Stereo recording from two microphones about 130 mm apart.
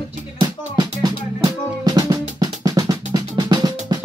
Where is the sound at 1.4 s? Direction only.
30° right (ahead or behind).